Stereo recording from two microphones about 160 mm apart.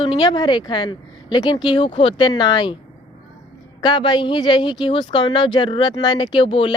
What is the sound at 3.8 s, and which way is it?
A woman's voice, 30° left (ahead or behind).